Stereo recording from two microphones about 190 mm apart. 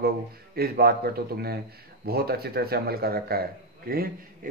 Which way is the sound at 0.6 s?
55° right (ahead or behind).